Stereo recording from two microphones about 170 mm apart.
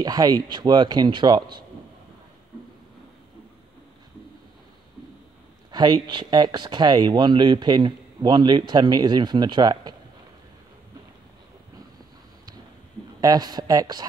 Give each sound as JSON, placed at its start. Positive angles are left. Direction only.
{"t": 0.0, "sound": "speech", "side_deg": -20}
{"t": 5.7, "sound": "speech", "side_deg": -25}
{"t": 13.2, "sound": "speech", "side_deg": -20}